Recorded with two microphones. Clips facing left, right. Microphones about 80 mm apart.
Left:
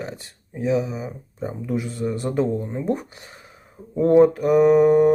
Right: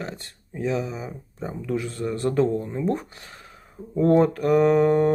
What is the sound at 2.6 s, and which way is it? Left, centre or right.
Speech, left.